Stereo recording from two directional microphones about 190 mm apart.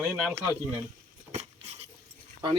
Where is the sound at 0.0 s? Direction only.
Centre (ahead or behind).